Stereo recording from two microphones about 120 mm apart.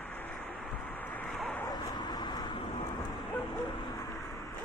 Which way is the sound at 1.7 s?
35° left (ahead or behind).